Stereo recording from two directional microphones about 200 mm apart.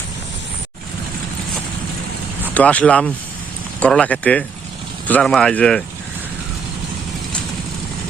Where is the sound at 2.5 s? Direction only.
5° left (ahead or behind).